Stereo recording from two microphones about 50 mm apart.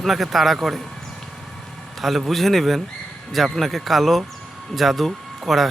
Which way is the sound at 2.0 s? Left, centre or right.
Centre.